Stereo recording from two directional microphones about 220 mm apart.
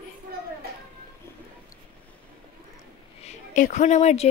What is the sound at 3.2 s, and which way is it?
A woman's voice, 35° left (ahead or behind).